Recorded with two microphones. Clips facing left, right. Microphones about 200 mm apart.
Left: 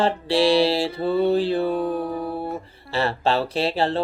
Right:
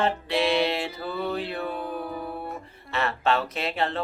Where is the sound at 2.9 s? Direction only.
30° left (ahead or behind).